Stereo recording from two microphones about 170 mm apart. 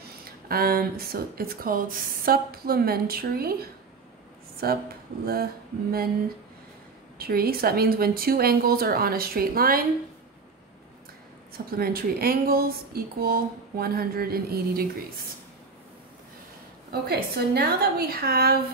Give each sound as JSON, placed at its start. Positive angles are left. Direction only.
{"t": 0.5, "sound": "speech", "side_deg": -60}
{"t": 4.6, "sound": "speech", "side_deg": -65}
{"t": 7.2, "sound": "speech", "side_deg": -60}
{"t": 11.5, "sound": "speech", "side_deg": -60}
{"t": 16.9, "sound": "speech", "side_deg": -65}